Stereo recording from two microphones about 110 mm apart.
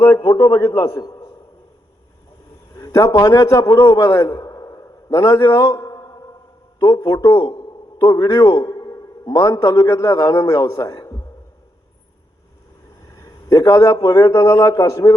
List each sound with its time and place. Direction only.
0.2 s a man's voice: 50° left (ahead or behind)
0.6 s a man's voice: 25° left (ahead or behind)
2.7 s a man's voice: 25° left (ahead or behind)
3.8 s a sound: 25° left (ahead or behind)
6.7 s a man's voice: 30° left (ahead or behind)
13.1 s a man's voice: 25° left (ahead or behind)